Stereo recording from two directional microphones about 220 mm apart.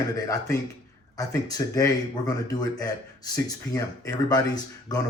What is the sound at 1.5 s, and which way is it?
Speech, 15° left (ahead or behind).